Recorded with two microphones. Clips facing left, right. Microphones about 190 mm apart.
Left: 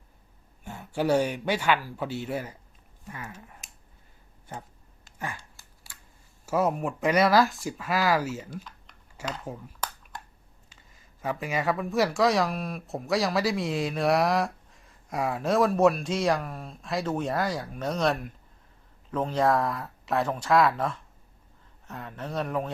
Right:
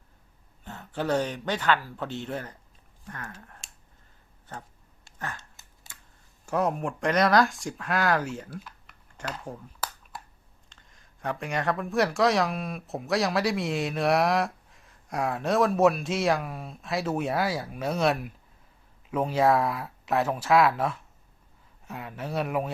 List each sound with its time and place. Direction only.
0.6 s a man's voice: 10° left (ahead or behind)
5.4 s scissors: 20° right (ahead or behind)
6.4 s speech: 5° left (ahead or behind)